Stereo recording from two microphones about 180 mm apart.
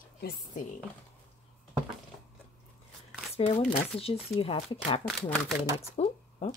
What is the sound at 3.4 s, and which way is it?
Speech, 40° left (ahead or behind).